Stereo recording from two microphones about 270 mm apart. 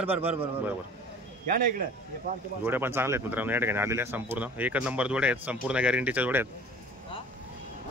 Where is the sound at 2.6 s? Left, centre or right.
Centre.